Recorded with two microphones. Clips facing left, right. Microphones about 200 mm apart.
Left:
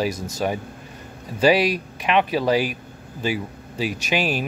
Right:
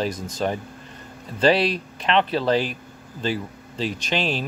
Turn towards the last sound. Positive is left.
turn(degrees=10)  # may be behind; listen again after turning